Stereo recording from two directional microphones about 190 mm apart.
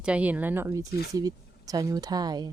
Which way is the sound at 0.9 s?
55° left (ahead or behind).